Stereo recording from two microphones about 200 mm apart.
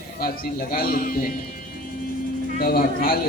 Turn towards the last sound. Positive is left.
turn(degrees=50)  # may be behind; listen again after turning